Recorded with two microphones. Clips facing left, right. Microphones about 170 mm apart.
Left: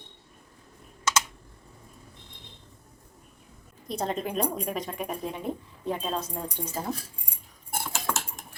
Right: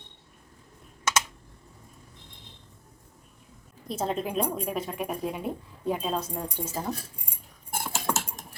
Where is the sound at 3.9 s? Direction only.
Centre (ahead or behind).